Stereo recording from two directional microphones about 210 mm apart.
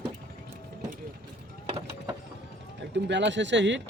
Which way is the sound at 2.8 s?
60° right (ahead or behind).